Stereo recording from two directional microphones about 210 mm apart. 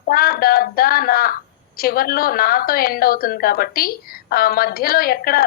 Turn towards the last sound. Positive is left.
turn(degrees=45)  # may be behind; listen again after turning